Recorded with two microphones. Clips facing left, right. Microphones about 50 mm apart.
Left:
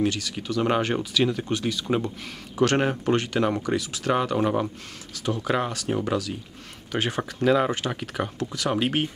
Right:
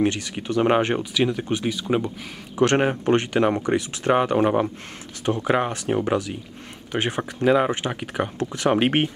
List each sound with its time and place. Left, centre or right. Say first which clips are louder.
0.0 s speech: right 3 dB; right
0.9 s speech: right 1 dB; centre
3.1 s speech: right 5 dB; right
8.4 s speech: right 6 dB; right